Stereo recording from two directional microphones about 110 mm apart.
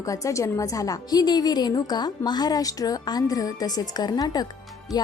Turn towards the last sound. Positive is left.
turn(degrees=35)  # may be behind; listen again after turning